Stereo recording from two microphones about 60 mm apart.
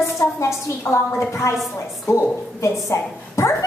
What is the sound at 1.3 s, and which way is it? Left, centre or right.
Speech, left.